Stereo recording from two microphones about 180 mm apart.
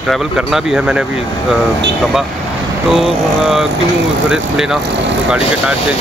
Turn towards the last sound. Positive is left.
turn(degrees=-5)  # may be behind; listen again after turning